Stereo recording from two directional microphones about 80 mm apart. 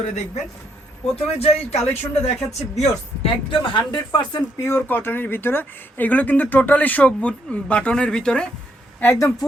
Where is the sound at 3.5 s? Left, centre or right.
Left.